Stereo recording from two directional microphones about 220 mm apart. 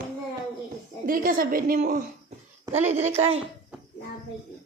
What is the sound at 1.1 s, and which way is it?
Speech, 40° right (ahead or behind).